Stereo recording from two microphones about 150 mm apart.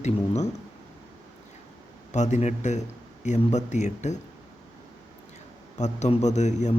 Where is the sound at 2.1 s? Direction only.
50° left (ahead or behind).